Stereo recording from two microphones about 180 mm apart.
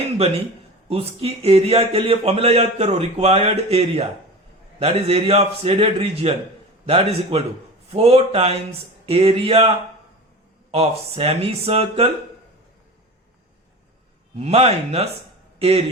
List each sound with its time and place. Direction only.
0.9 s speech: 35° right (ahead or behind)
14.3 s speech: 35° right (ahead or behind)